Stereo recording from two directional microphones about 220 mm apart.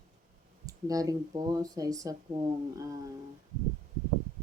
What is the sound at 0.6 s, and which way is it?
Speech, 15° right (ahead or behind).